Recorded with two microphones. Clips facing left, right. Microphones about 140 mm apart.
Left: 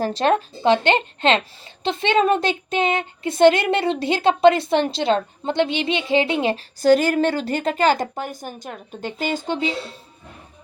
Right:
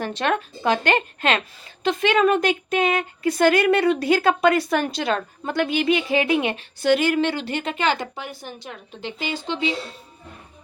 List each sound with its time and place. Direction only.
0.0 s a woman's voice: 35° left (ahead or behind)